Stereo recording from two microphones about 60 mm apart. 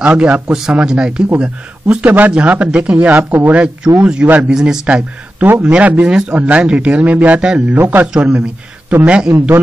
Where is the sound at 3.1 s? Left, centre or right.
Right.